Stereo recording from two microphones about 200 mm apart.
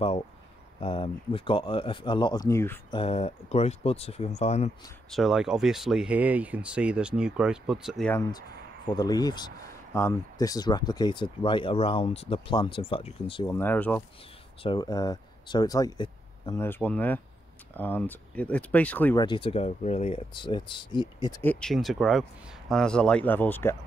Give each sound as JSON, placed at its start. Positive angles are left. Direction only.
{"t": 0.7, "sound": "speech", "side_deg": 25}
{"t": 2.9, "sound": "speech", "side_deg": 30}
{"t": 5.1, "sound": "speech", "side_deg": 0}
{"t": 8.1, "sound": "speech", "side_deg": 20}
{"t": 13.6, "sound": "speech", "side_deg": 10}
{"t": 14.6, "sound": "speech", "side_deg": 20}
{"t": 16.6, "sound": "speech", "side_deg": 10}
{"t": 19.2, "sound": "speech", "side_deg": 25}